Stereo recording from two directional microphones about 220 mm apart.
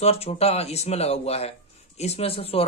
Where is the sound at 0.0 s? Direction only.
25° left (ahead or behind).